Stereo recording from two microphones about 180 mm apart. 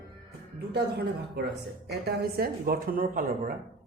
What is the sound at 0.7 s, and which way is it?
Speech, 65° right (ahead or behind).